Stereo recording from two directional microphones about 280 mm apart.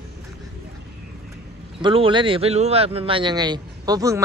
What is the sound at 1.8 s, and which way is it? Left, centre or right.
A man's voice, centre.